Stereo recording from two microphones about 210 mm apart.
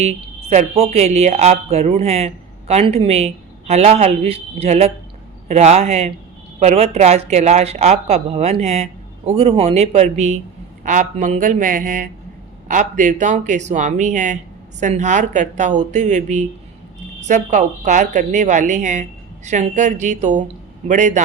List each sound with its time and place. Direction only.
0.5 s a woman's voice: 30° right (ahead or behind)